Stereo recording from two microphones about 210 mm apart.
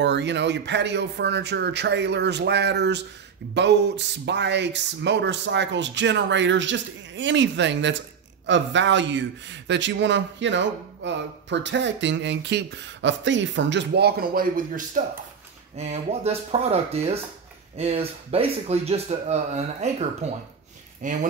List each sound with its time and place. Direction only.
0.0 s speech: 55° right (ahead or behind)
15.0 s speech: 40° right (ahead or behind)